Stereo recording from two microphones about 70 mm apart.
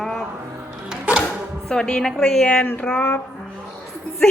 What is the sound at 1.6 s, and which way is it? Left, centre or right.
Speech, centre.